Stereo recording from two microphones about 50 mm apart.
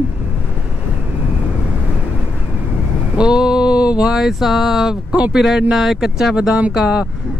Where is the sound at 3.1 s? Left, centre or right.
Centre.